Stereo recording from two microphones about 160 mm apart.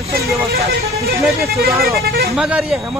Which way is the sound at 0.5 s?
75° right (ahead or behind).